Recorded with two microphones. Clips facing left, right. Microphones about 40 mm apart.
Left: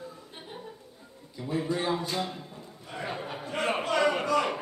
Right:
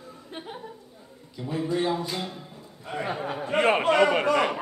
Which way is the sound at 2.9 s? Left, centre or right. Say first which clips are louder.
Right 5 dB; right.